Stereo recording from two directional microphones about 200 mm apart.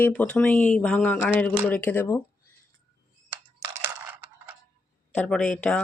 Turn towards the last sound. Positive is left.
turn(degrees=5)  # may be behind; listen again after turning